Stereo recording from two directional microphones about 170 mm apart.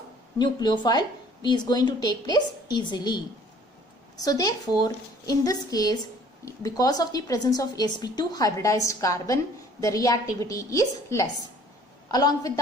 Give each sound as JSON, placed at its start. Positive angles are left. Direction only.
{"t": 0.4, "sound": "a woman's voice", "side_deg": 25}